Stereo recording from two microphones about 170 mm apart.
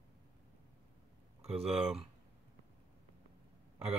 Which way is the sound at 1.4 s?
35° right (ahead or behind).